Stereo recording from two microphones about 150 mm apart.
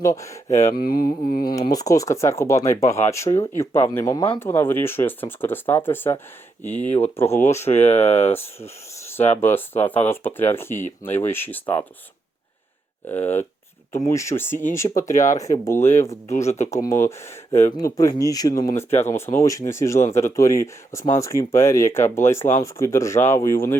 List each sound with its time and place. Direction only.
0.0 s speech: 20° left (ahead or behind)
0.8 s mantra: 70° left (ahead or behind)
1.7 s speech: 25° left (ahead or behind)
4.4 s speech: 15° left (ahead or behind)
6.8 s speech: 45° left (ahead or behind)
7.4 s speech: 15° left (ahead or behind)
7.7 s speech: 45° left (ahead or behind)
8.4 s rub: 15° left (ahead or behind)
9.4 s speech: 15° left (ahead or behind)
13.1 s speech: 15° left (ahead or behind)
15.1 s speech: 55° left (ahead or behind)
15.6 s speech: 15° left (ahead or behind)
16.3 s speech: 50° left (ahead or behind)
16.9 s speech: 20° left (ahead or behind)